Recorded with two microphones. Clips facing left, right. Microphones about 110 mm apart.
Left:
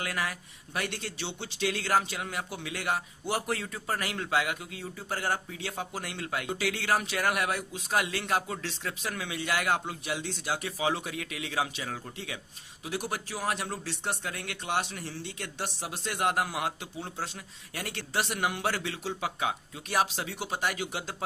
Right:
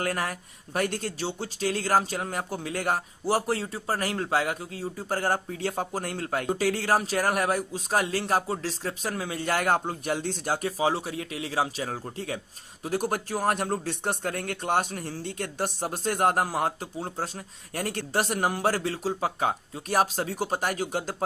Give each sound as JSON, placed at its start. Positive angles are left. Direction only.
{"t": 0.0, "sound": "speech", "side_deg": -45}